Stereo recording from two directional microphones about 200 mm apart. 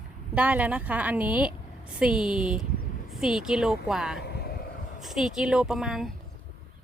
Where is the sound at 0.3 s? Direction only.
5° right (ahead or behind).